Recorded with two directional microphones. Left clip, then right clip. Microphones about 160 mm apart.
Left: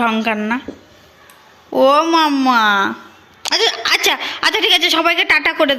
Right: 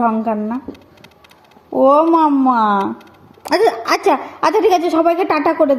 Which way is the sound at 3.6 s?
30° left (ahead or behind).